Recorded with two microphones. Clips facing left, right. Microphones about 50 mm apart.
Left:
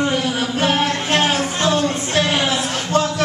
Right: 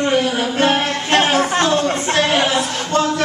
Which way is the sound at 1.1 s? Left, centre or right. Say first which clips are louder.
Right 6 dB; centre.